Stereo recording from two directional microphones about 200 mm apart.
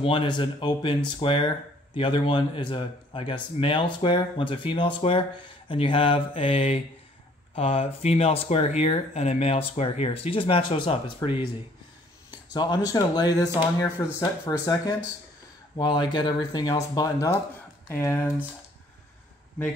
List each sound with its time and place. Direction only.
0.0 s speech: 25° left (ahead or behind)
11.2 s speech: 20° left (ahead or behind)
12.5 s speech: 20° left (ahead or behind)